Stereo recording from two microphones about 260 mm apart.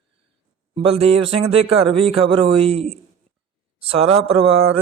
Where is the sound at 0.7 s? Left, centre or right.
Right.